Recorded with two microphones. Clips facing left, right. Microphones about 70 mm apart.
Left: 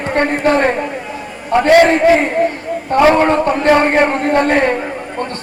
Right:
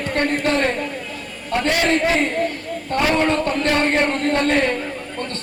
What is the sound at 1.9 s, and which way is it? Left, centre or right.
A man's voice, left.